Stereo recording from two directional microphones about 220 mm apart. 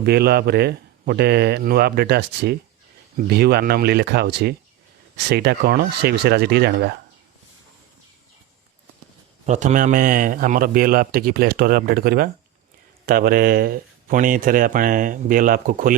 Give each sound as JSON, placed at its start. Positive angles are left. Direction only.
{"t": 0.0, "sound": "speech", "side_deg": -45}
{"t": 9.5, "sound": "speech", "side_deg": -35}